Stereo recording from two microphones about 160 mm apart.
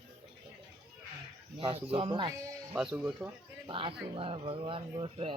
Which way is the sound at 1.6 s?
35° right (ahead or behind).